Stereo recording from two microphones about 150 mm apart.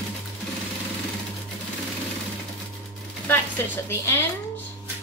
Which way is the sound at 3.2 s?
10° left (ahead or behind).